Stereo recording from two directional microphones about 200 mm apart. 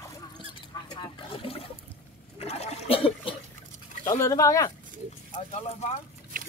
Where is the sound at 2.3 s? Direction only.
30° left (ahead or behind).